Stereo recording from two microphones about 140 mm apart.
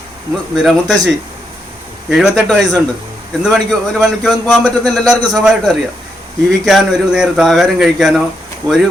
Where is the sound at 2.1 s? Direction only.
5° right (ahead or behind).